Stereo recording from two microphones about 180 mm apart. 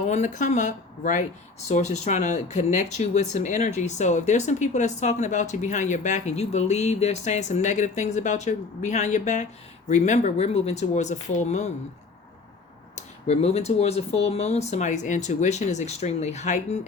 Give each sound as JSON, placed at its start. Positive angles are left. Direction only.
{"t": 0.0, "sound": "speech", "side_deg": 40}
{"t": 13.0, "sound": "speech", "side_deg": 35}